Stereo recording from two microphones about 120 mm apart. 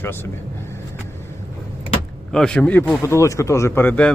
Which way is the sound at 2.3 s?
5° left (ahead or behind).